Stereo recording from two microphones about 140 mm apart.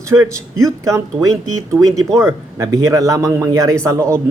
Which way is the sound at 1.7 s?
10° right (ahead or behind).